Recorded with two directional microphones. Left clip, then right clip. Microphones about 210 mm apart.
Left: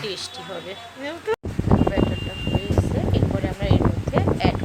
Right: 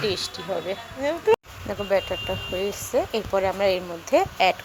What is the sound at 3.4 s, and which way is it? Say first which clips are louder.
Speech: right 7 dB; 20° right (ahead or behind).